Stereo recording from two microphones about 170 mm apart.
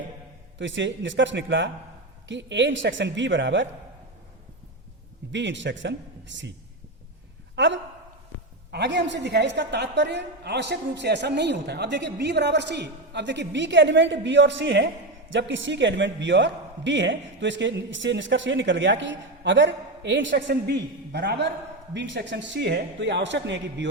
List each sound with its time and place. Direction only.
0.6 s a man's voice: 90° right
5.3 s a man's voice: 90° right
7.5 s a woman's voice: 90° right